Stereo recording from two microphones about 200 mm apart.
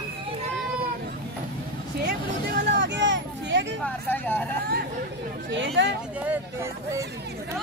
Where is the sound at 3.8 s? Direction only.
10° left (ahead or behind).